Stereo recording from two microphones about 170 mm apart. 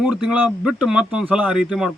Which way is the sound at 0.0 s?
5° right (ahead or behind).